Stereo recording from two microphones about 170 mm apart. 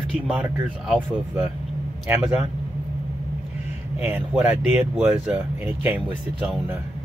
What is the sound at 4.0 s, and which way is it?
Speech, 15° right (ahead or behind).